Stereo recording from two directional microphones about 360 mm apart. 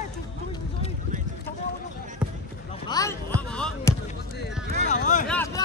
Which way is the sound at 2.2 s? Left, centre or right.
Centre.